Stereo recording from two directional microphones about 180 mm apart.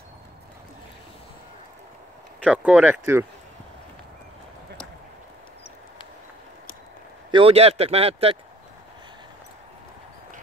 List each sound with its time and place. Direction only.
2.5 s speech: 10° right (ahead or behind)
7.2 s speech: 30° right (ahead or behind)